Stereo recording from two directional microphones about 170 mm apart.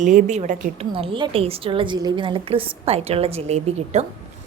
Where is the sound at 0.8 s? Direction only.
35° right (ahead or behind).